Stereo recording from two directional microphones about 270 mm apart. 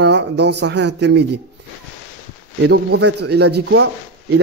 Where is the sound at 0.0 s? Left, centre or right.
Right.